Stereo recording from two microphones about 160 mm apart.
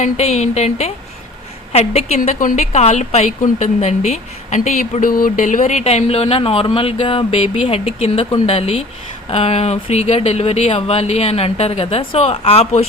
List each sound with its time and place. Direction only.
0.0 s a woman's voice: 45° left (ahead or behind)